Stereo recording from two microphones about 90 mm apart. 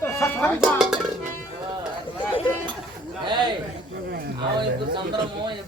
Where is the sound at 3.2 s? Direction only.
60° right (ahead or behind).